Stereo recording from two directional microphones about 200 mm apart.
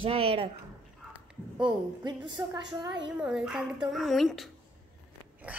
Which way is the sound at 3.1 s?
5° right (ahead or behind).